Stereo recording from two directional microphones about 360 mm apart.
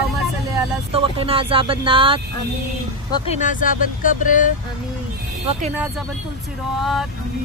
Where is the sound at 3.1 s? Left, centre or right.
Centre.